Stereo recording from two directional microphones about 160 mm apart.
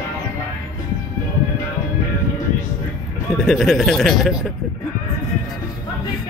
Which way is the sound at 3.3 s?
Centre (ahead or behind).